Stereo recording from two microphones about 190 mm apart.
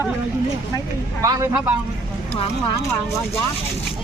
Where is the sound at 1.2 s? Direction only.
20° right (ahead or behind).